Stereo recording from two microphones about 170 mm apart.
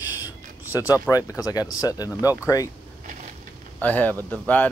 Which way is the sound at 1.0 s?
20° left (ahead or behind).